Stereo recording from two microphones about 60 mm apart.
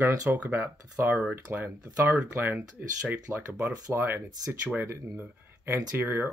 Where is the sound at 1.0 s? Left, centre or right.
Right.